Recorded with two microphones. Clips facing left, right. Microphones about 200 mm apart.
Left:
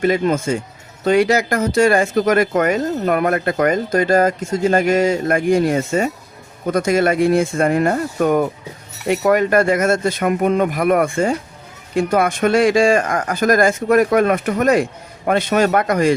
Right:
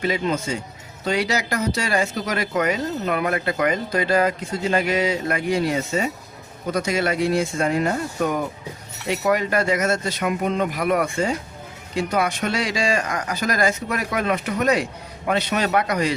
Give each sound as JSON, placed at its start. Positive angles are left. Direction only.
{"t": 0.0, "sound": "speech", "side_deg": 50}